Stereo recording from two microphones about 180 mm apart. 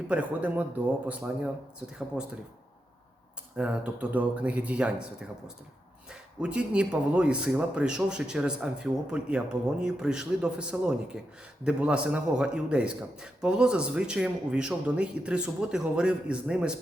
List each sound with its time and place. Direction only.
0.1 s speech: 10° right (ahead or behind)
3.6 s speech: 10° right (ahead or behind)